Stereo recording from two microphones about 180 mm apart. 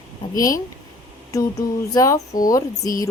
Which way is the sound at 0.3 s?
20° left (ahead or behind).